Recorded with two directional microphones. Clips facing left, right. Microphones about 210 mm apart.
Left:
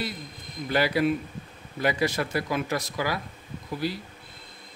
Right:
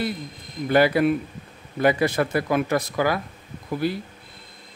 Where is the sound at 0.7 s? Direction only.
55° right (ahead or behind).